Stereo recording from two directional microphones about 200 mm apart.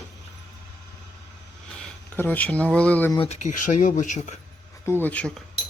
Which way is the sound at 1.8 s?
10° left (ahead or behind).